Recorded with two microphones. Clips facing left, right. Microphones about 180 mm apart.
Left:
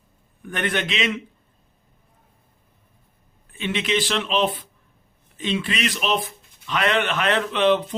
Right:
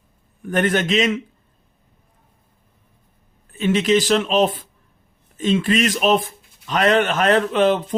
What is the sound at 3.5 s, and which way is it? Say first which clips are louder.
Speech: right 7 dB; 40° right (ahead or behind).